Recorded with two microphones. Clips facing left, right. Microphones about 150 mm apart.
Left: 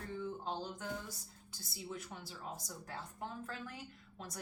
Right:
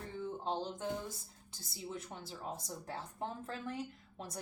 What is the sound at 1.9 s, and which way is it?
A woman's voice, 30° right (ahead or behind).